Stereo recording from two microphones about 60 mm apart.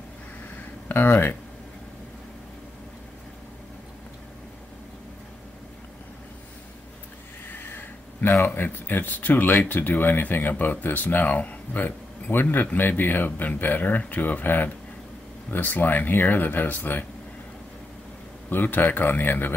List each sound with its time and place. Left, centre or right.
0.8 s speech: left
7.4 s a sound: left
8.5 s speech: left
18.5 s speech: left